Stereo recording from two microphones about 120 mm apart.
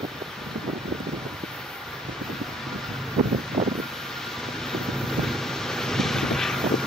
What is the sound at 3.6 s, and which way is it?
Vehicle, 65° right (ahead or behind).